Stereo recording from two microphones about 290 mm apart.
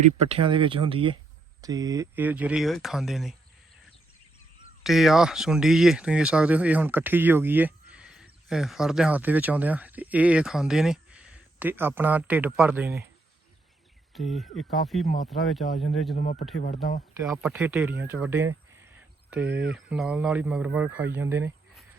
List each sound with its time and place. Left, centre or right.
0.0 s speech: right; by 3.3 s centre
4.8 s speech: centre
14.1 s speech: centre
16.1 s speech: left
17.2 s speech: centre